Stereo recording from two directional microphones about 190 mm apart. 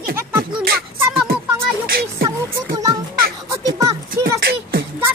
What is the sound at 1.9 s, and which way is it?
Speech, 50° right (ahead or behind).